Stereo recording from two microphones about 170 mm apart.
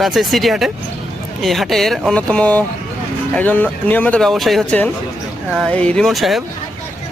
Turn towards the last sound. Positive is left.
turn(degrees=0)  # may be behind; listen again after turning